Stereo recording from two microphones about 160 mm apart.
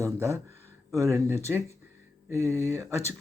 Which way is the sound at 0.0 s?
15° right (ahead or behind).